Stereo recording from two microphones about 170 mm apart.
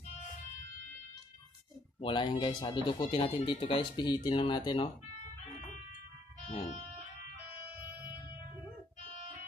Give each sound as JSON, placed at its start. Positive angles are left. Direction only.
{"t": 2.0, "sound": "speech", "side_deg": 25}